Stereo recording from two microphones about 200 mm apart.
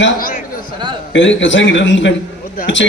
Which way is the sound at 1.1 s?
70° left (ahead or behind).